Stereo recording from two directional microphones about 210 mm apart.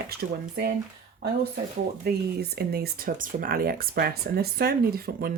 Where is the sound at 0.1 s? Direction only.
50° right (ahead or behind).